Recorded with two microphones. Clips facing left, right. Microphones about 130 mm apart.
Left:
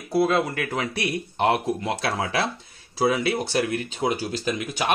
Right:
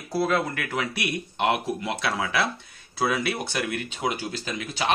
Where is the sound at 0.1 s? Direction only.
20° left (ahead or behind); by 4.6 s 40° left (ahead or behind).